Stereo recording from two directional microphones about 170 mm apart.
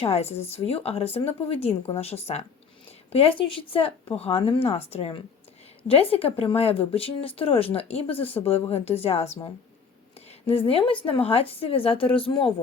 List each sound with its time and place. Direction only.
0.0 s speech: 35° left (ahead or behind)
10.4 s speech: 35° left (ahead or behind)